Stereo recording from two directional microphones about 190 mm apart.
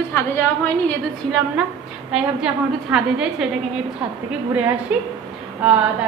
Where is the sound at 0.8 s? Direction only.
Centre (ahead or behind).